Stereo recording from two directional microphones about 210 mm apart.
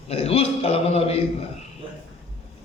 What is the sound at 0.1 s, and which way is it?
A man's voice, 30° left (ahead or behind).